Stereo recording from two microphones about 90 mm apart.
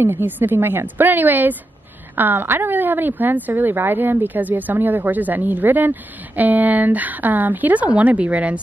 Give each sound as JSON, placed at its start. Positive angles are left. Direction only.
{"t": 0.0, "sound": "speech", "side_deg": -20}